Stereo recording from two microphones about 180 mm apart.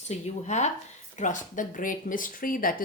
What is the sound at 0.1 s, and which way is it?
A woman's voice, 40° left (ahead or behind).